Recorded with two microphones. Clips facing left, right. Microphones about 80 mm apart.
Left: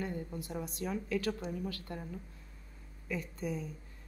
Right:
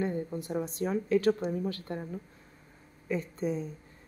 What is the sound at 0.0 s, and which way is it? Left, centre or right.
Speech, right.